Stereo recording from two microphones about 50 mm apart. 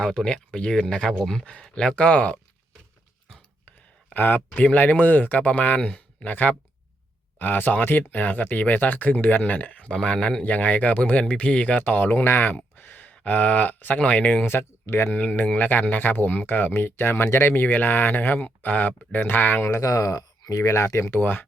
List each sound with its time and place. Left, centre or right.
0.0 s speech: centre
3.7 s a sound: left
4.5 s speech: left
11.8 s speech: left
14.4 s speech: left
15.1 s speech: left
17.2 s speech: left
17.5 s speech: left
18.3 s speech: left
20.7 s speech: left
21.2 s speech: left